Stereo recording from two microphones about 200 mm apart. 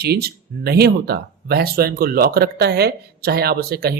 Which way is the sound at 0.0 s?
50° right (ahead or behind).